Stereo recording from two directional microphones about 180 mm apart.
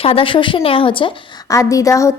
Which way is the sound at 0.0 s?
30° left (ahead or behind).